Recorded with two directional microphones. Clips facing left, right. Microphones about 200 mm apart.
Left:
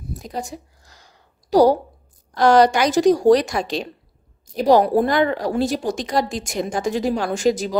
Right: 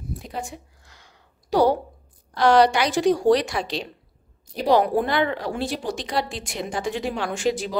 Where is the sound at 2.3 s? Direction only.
45° left (ahead or behind).